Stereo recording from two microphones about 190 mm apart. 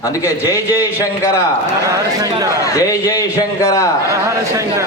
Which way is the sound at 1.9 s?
20° right (ahead or behind).